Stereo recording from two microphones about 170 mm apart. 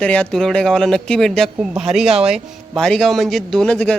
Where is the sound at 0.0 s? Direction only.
5° left (ahead or behind).